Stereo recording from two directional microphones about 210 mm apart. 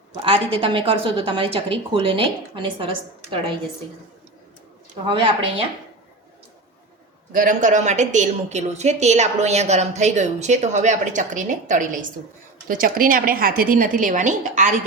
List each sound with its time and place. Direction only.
0.2 s a woman's voice: 25° right (ahead or behind)
5.0 s a woman's voice: 25° right (ahead or behind)
7.3 s a woman's voice: 40° right (ahead or behind)